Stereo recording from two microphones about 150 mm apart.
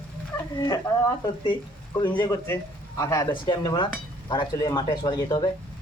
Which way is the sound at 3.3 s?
30° left (ahead or behind).